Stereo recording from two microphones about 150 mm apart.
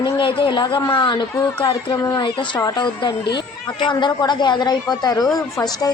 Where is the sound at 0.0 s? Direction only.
35° left (ahead or behind).